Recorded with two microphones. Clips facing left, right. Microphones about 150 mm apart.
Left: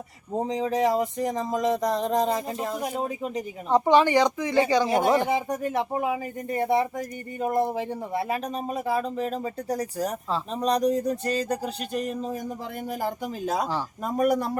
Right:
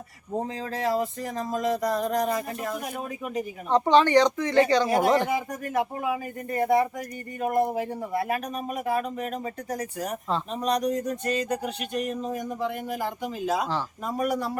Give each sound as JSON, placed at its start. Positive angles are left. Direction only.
{"t": 0.3, "sound": "speech", "side_deg": 20}
{"t": 3.7, "sound": "speech", "side_deg": 10}
{"t": 4.9, "sound": "speech", "side_deg": 25}